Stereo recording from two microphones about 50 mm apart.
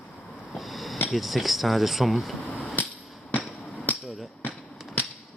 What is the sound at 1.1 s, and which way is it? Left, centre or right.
Speech, centre.